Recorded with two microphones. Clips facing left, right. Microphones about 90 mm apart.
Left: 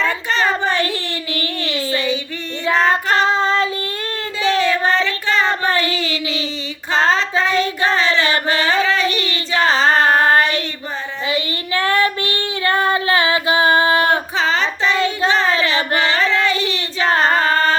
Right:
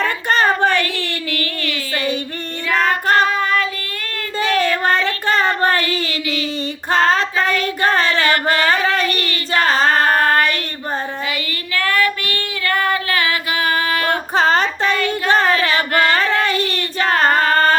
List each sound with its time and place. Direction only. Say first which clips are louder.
0.0 s child singing: right 2 dB; 50° right (ahead or behind)
1.3 s a sound: left 3 dB; 25° left (ahead or behind)
3.2 s female singing: left 2 dB; 25° left (ahead or behind)
4.4 s child singing: even; 50° right (ahead or behind)
8.3 s carnatic music: right 2 dB; 50° right (ahead or behind)
8.8 s child singing: even; 50° right (ahead or behind)
9.5 s female singing: even; 45° right (ahead or behind)
10.2 s child singing: left 1 dB; 25° left (ahead or behind)
14.3 s child singing: right 3 dB; 45° right (ahead or behind)
14.9 s child singing: left 2 dB; 25° left (ahead or behind)
16.0 s carnatic music: right 2 dB; 50° right (ahead or behind)
17.2 s female singing: right 1 dB; 45° right (ahead or behind)
17.5 s music: right 2 dB; 45° right (ahead or behind)